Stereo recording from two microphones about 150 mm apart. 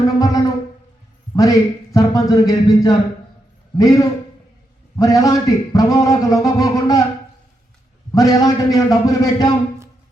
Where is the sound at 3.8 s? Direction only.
20° left (ahead or behind).